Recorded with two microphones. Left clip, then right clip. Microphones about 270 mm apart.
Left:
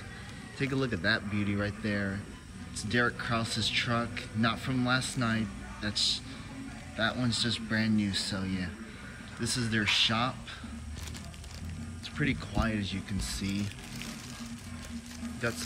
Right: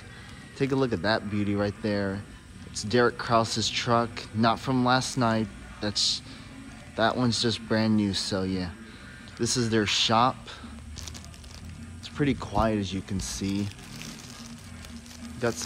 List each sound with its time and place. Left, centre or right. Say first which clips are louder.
0.6 s speech: right 6 dB; centre
7.0 s speech: right 6 dB; centre
12.2 s speech: right 6 dB; centre
15.4 s speech: right 5 dB; centre